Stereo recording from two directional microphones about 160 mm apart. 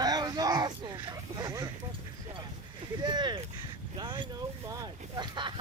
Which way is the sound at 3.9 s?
30° right (ahead or behind).